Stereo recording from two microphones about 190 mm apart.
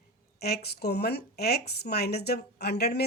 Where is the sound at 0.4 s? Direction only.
55° left (ahead or behind).